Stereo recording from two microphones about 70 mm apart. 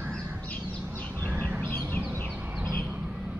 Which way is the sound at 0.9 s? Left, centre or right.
Left.